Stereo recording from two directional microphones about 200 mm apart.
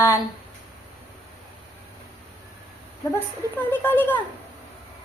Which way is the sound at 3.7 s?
10° left (ahead or behind).